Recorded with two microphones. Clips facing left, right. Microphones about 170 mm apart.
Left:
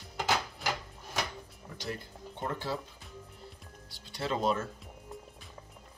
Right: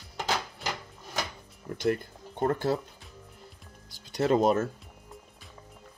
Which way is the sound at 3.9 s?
45° right (ahead or behind).